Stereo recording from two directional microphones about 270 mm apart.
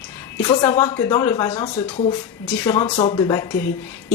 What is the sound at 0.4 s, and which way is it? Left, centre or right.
Speech, centre.